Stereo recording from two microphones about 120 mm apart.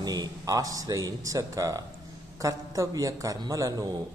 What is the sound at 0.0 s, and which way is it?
A man's voice, 35° right (ahead or behind).